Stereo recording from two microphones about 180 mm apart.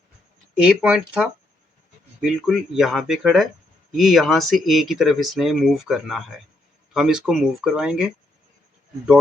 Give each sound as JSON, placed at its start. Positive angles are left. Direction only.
{"t": 0.6, "sound": "speech", "side_deg": -5}